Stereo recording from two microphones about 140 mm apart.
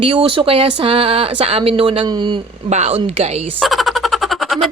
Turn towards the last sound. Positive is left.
turn(degrees=0)  # may be behind; listen again after turning